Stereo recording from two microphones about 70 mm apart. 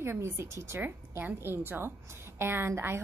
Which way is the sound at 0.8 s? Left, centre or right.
Right.